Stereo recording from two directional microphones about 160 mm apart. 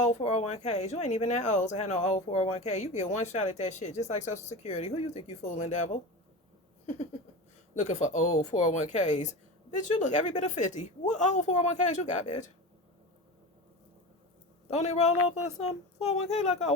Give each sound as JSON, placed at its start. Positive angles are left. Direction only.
{"t": 0.0, "sound": "speech", "side_deg": 45}
{"t": 7.8, "sound": "speech", "side_deg": 50}
{"t": 14.7, "sound": "speech", "side_deg": 45}